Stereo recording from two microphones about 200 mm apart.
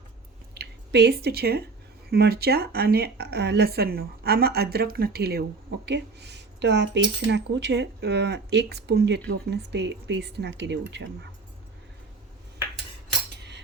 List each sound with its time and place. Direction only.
0.5 s speech: 55° right (ahead or behind)